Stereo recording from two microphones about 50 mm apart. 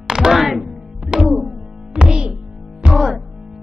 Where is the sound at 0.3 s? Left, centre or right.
Centre.